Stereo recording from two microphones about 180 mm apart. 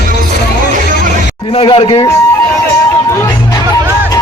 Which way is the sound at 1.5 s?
30° left (ahead or behind).